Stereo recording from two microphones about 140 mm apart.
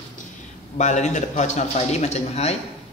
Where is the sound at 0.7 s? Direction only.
55° left (ahead or behind).